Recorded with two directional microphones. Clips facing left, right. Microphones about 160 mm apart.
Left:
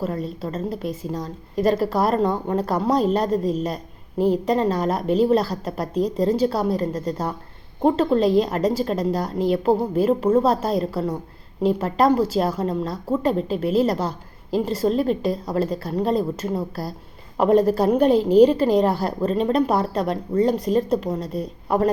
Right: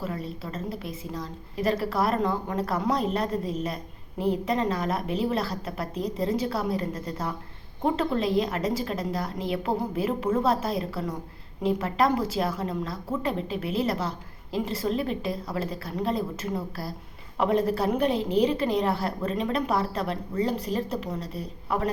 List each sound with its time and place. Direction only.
0.0 s a woman's voice: 40° left (ahead or behind)